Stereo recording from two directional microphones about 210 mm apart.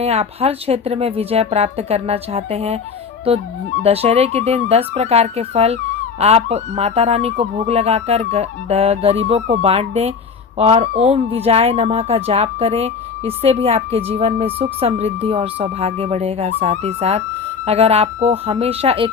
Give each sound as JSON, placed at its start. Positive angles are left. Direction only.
{"t": 0.0, "sound": "speech", "side_deg": -30}